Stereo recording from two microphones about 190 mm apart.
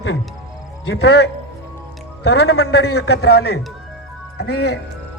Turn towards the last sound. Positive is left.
turn(degrees=60)  # may be behind; listen again after turning